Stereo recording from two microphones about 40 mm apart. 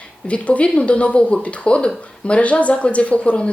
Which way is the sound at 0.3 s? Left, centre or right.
Left.